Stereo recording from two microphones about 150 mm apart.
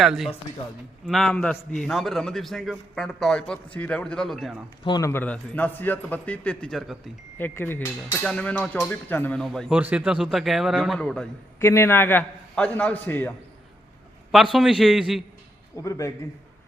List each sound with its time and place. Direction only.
0.0 s a man's voice: centre (ahead or behind)
4.9 s a man's voice: 20° left (ahead or behind)
5.2 s a man's voice: 10° left (ahead or behind)
7.3 s a man's voice: 15° left (ahead or behind)
9.4 s a man's voice: centre (ahead or behind)
11.6 s a man's voice: 15° left (ahead or behind)
14.5 s a man's voice: centre (ahead or behind)
15.7 s a man's voice: 20° left (ahead or behind)